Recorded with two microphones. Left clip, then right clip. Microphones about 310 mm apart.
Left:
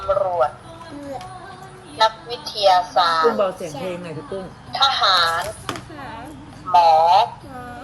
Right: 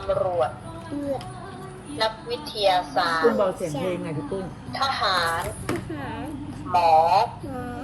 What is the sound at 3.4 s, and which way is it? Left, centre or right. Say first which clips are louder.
Speech: left 2 dB; left.